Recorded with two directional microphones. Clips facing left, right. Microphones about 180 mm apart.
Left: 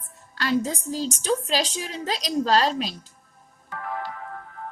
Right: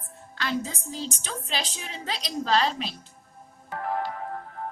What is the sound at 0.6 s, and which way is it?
A woman's voice, 40° left (ahead or behind).